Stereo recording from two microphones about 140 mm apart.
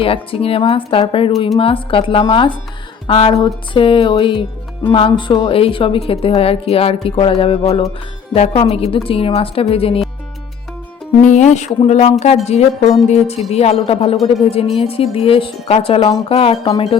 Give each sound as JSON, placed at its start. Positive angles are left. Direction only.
{"t": 0.0, "sound": "music", "side_deg": 40}
{"t": 3.1, "sound": "speech", "side_deg": 45}
{"t": 3.4, "sound": "music", "side_deg": 40}
{"t": 8.3, "sound": "speech", "side_deg": 45}
{"t": 11.2, "sound": "speech", "side_deg": 60}
{"t": 16.7, "sound": "music", "side_deg": 35}